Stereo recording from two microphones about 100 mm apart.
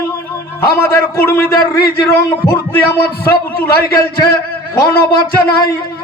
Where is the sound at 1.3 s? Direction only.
25° left (ahead or behind).